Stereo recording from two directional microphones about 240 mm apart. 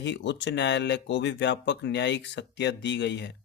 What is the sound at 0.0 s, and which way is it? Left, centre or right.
Speech, left.